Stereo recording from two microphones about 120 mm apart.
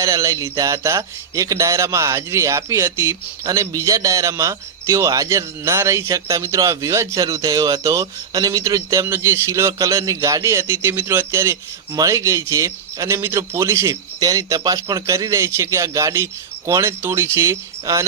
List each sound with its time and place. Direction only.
0.0 s speech: 25° right (ahead or behind)